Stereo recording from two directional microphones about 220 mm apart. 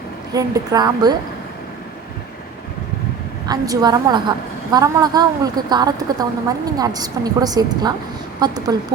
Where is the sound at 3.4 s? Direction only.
15° right (ahead or behind).